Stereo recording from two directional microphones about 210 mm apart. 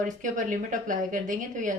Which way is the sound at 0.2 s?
40° right (ahead or behind).